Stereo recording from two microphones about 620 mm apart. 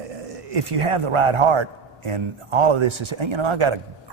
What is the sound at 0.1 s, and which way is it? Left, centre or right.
Speech, right.